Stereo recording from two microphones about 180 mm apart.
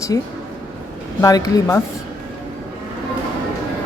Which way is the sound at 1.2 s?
20° left (ahead or behind).